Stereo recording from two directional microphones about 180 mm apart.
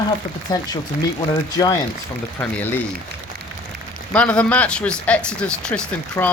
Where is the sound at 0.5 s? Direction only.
20° left (ahead or behind).